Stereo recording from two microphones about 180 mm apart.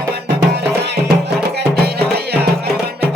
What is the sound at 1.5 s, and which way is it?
Music, 60° right (ahead or behind).